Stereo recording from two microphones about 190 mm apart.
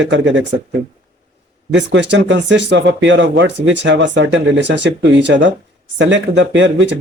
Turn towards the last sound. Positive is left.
turn(degrees=-70)  # may be behind; listen again after turning